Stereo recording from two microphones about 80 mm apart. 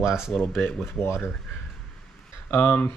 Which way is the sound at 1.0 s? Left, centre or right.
Left.